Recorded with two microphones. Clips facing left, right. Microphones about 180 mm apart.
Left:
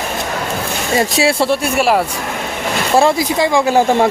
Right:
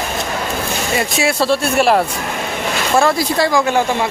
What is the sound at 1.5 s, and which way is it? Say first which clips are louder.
Speech: even; 10° left (ahead or behind).